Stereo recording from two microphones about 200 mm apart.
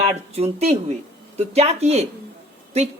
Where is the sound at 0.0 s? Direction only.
30° right (ahead or behind).